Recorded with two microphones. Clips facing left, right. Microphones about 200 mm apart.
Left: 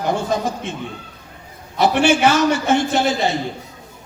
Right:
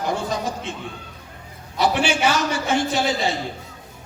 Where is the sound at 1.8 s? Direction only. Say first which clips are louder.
Left 5 dB; 60° left (ahead or behind).